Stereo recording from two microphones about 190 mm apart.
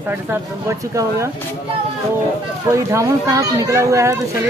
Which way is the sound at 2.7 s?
15° right (ahead or behind).